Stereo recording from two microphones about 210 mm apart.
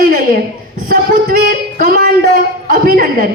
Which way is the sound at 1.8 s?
50° right (ahead or behind).